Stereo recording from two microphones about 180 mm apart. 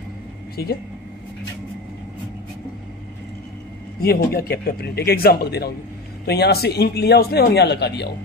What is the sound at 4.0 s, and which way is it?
A man's voice, 60° left (ahead or behind).